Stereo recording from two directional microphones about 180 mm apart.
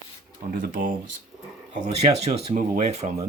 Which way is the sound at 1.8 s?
40° right (ahead or behind).